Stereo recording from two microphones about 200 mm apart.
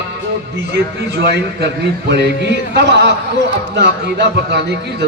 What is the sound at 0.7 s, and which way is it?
A man's voice, 55° right (ahead or behind).